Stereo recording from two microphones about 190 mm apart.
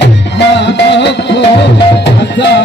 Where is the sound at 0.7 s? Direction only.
65° left (ahead or behind).